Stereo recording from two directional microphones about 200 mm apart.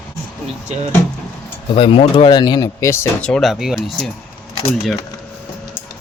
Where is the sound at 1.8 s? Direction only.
25° left (ahead or behind); by 4.1 s centre (ahead or behind).